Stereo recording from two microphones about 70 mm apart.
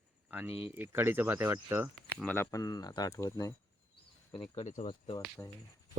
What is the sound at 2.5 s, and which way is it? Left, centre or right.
Speech, left.